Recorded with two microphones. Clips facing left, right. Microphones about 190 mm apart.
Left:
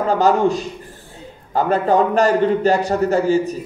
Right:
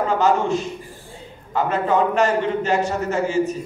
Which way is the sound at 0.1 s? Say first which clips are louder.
Left 5 dB; 35° left (ahead or behind).